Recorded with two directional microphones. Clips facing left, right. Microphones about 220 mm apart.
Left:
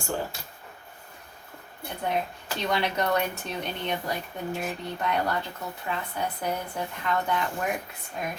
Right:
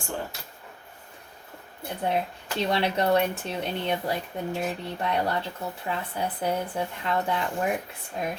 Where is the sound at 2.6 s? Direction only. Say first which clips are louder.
Right 2 dB; 30° right (ahead or behind).